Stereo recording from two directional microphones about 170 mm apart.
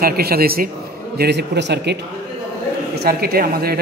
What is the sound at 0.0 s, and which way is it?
Speech, 65° right (ahead or behind).